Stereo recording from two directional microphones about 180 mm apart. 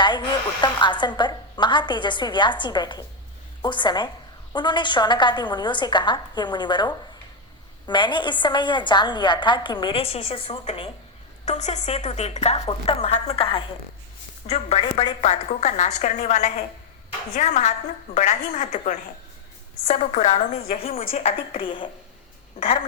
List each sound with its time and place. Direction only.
0.0 s a woman's voice: 25° left (ahead or behind)